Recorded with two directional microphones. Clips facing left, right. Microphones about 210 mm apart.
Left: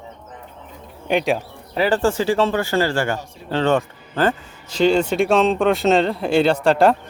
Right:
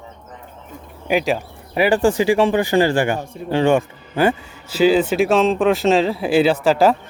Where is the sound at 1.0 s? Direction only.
5° right (ahead or behind).